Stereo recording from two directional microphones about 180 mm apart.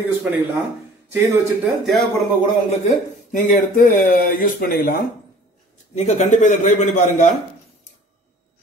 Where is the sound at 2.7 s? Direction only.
45° left (ahead or behind).